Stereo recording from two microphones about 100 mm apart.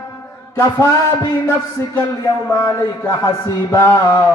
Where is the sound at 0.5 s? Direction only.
30° left (ahead or behind).